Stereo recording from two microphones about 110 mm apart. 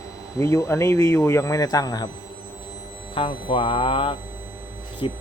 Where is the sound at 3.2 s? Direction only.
50° left (ahead or behind).